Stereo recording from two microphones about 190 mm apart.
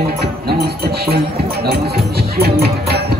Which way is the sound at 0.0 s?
55° right (ahead or behind).